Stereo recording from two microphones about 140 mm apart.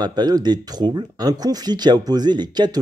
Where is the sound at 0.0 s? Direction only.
30° right (ahead or behind).